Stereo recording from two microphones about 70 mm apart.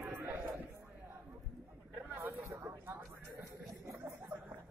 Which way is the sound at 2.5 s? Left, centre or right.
Right.